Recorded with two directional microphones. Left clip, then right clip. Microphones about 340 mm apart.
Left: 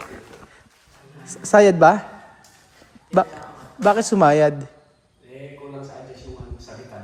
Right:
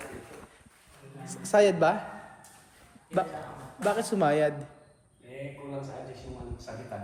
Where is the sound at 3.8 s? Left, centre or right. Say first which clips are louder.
Left 11 dB; centre.